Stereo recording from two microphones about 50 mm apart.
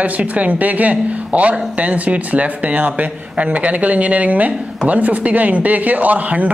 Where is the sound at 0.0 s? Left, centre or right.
Right.